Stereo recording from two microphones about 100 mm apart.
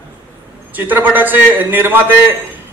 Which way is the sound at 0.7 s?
20° right (ahead or behind).